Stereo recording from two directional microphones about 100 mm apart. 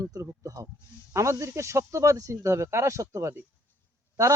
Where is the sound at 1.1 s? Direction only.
30° right (ahead or behind).